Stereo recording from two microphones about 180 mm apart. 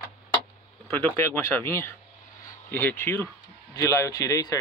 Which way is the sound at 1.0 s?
15° left (ahead or behind).